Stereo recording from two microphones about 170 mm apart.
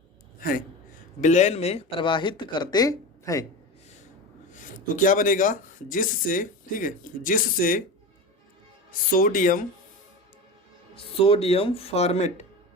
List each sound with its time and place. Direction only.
0.3 s gasp: 55° left (ahead or behind)
1.2 s speech: 45° left (ahead or behind); by 3.4 s 20° left (ahead or behind)
4.5 s speech: 50° left (ahead or behind)
8.9 s speech: 55° left (ahead or behind)
10.9 s speech: 35° left (ahead or behind)